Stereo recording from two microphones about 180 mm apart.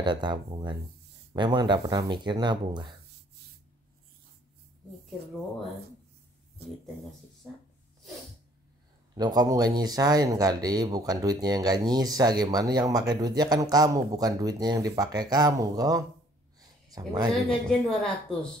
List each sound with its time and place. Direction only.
0.0 s speech: 25° right (ahead or behind)
9.1 s speech: 20° right (ahead or behind)
16.5 s a sound: 20° right (ahead or behind)
17.6 s a woman's voice: 5° left (ahead or behind)